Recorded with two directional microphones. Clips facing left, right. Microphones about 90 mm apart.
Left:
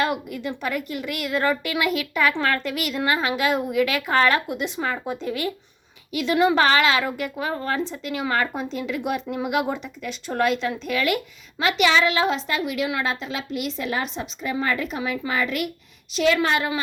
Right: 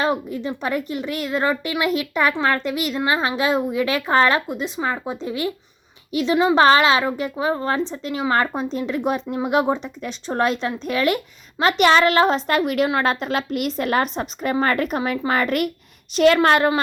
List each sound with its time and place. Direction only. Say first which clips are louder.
0.4 s a woman's voice: right 2 dB; 30° right (ahead or behind)
6.6 s a woman's voice: right 4 dB; 30° right (ahead or behind); by 16.8 s 50° right (ahead or behind)